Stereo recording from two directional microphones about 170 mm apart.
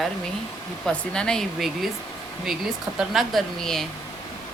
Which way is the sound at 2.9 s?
Centre (ahead or behind).